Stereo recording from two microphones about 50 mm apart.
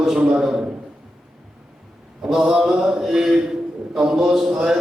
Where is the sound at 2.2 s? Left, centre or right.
Centre.